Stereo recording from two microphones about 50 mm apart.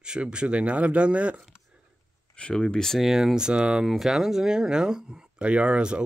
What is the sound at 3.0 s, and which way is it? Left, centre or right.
Speech, centre.